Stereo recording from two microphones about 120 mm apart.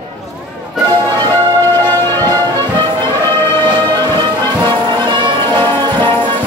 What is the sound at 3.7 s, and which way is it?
Music, 35° right (ahead or behind).